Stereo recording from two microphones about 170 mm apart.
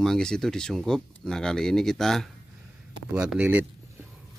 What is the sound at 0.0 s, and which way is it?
Speech, 5° left (ahead or behind).